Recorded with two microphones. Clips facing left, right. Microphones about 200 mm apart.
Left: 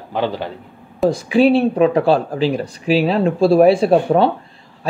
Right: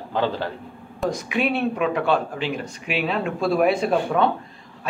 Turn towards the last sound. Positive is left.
turn(degrees=30)  # may be behind; listen again after turning